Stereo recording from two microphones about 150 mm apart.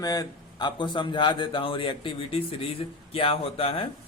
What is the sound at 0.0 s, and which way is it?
Speech, 25° left (ahead or behind).